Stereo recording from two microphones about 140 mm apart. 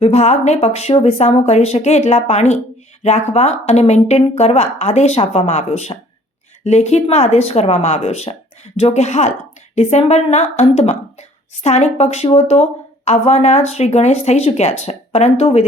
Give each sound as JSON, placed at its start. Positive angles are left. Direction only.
{"t": 0.0, "sound": "speech", "side_deg": 50}